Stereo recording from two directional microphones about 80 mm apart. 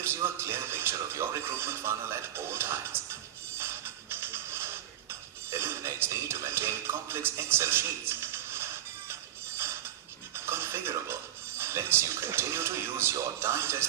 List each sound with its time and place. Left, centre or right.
0.0 s speech: right
3.6 s music: right
10.3 s speech: right